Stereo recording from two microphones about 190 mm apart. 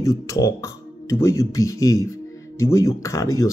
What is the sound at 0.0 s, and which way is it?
Speech, 15° left (ahead or behind).